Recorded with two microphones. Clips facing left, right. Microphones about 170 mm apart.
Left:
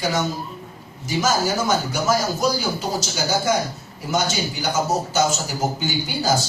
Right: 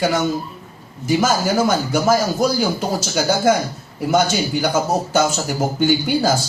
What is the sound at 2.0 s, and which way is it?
A man's voice, 55° right (ahead or behind).